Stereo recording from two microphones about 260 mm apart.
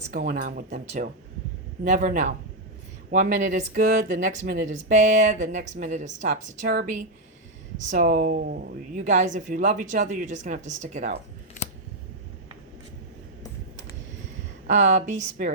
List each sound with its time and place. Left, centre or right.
0.1 s speech: right
14.7 s speech: right